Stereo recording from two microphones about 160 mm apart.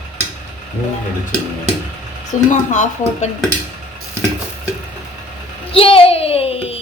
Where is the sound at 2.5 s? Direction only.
50° left (ahead or behind).